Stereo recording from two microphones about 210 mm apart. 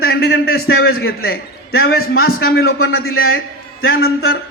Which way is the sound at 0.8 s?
75° left (ahead or behind).